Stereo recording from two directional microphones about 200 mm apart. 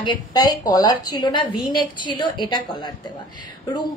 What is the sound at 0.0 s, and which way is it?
A woman's voice, 20° left (ahead or behind).